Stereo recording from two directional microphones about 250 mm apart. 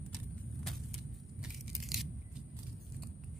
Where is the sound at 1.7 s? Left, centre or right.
Centre.